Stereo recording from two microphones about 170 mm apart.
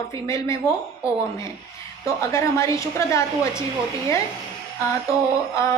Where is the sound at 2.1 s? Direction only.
15° left (ahead or behind).